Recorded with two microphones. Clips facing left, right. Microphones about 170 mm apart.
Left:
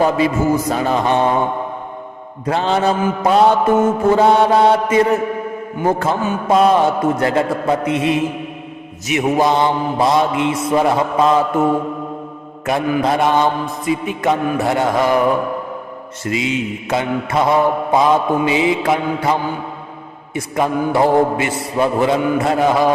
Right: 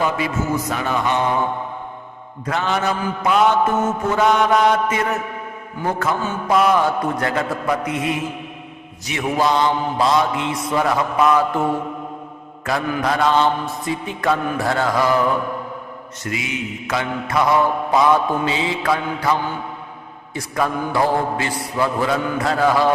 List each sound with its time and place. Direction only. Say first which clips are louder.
0.7 s mantra: left 5 dB; 35° left (ahead or behind)
2.5 s mantra: left 5 dB; 30° left (ahead or behind)
12.6 s mantra: left 4 dB; 20° left (ahead or behind)
16.2 s mantra: left 7 dB; 25° left (ahead or behind)